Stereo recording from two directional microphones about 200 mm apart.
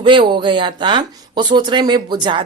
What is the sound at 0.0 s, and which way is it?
Speech, 25° right (ahead or behind).